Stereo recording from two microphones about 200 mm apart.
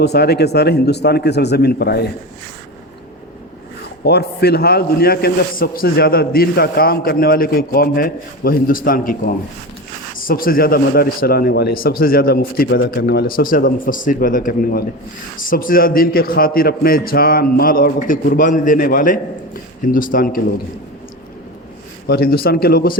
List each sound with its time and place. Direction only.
0.0 s a man's voice: 55° left (ahead or behind)
4.0 s a man's voice: 55° left (ahead or behind)
22.0 s a man's voice: 50° left (ahead or behind)